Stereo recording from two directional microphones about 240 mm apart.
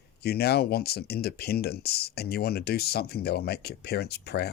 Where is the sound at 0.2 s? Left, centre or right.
Left.